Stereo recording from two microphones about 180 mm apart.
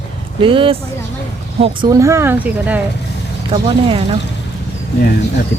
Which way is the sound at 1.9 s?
15° right (ahead or behind).